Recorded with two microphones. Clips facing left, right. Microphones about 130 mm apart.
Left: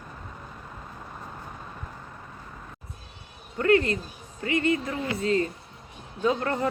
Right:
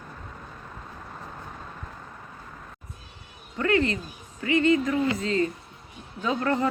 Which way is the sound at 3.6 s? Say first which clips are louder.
Left 2 dB; 40° left (ahead or behind).